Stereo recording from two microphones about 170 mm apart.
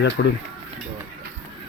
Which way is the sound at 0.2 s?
90° left.